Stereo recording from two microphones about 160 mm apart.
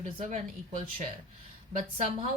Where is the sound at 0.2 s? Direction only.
50° right (ahead or behind).